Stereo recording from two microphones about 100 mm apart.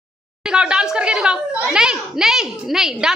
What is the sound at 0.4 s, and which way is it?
Speech, 10° right (ahead or behind).